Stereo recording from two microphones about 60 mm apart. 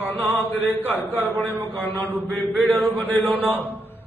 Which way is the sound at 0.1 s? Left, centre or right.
Left.